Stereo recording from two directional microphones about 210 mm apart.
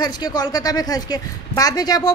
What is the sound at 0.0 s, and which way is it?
A woman's voice, 20° left (ahead or behind).